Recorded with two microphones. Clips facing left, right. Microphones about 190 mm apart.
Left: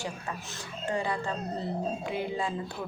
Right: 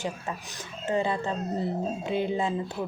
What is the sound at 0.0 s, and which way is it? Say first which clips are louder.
Speech: right 3 dB; 20° right (ahead or behind).